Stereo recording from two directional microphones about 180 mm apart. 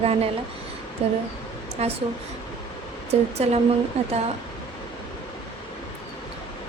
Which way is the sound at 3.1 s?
35° right (ahead or behind).